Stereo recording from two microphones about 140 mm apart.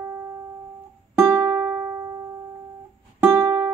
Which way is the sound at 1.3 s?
15° right (ahead or behind).